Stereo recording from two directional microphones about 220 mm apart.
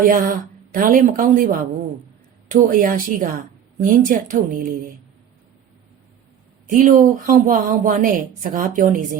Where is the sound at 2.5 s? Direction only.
35° right (ahead or behind).